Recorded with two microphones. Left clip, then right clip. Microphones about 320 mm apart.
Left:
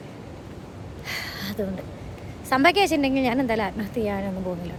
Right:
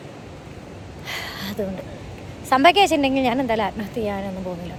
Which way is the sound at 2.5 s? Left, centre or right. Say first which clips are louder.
Right 4 dB; centre.